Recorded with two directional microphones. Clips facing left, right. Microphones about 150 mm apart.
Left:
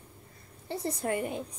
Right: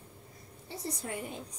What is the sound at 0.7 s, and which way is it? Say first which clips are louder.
Speech: left 7 dB; 60° left (ahead or behind).